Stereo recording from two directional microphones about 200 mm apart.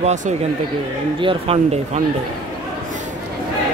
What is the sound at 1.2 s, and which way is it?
Speech, 30° right (ahead or behind).